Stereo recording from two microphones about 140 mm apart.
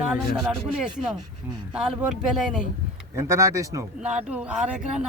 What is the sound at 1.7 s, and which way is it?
Speech, 5° right (ahead or behind).